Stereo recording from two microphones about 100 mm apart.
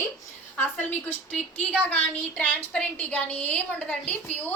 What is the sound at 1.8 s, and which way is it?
A woman's voice, 15° left (ahead or behind).